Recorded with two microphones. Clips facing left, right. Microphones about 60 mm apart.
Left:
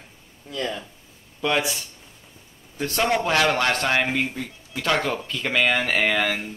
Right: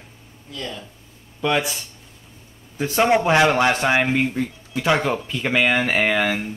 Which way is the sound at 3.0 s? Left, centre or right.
Right.